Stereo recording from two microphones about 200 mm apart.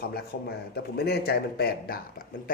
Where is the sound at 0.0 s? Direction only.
50° left (ahead or behind).